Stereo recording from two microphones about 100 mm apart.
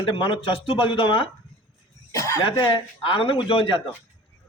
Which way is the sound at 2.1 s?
30° left (ahead or behind).